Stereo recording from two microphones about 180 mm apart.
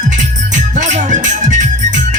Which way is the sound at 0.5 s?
45° right (ahead or behind).